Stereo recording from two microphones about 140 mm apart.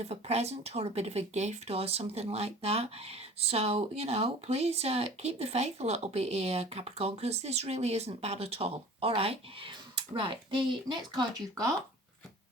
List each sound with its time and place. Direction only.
0.0 s speech: 50° right (ahead or behind); by 11.7 s 25° right (ahead or behind)